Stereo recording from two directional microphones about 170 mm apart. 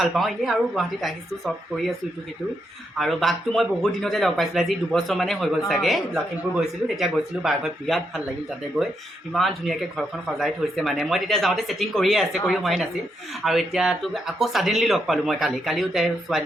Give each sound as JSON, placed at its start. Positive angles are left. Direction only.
{"t": 0.0, "sound": "speech", "side_deg": 0}
{"t": 3.0, "sound": "speech", "side_deg": 0}